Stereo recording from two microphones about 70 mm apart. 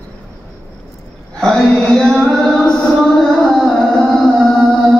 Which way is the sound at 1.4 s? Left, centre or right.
Centre.